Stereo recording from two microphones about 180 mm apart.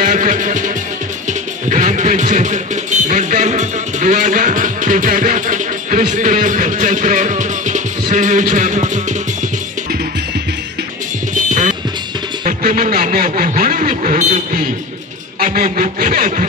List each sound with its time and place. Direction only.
0.0 s music: 45° right (ahead or behind)
1.7 s speech: 40° right (ahead or behind)
11.3 s music: 45° right (ahead or behind)
12.4 s a sound: 45° right (ahead or behind)
15.3 s speech: 50° right (ahead or behind)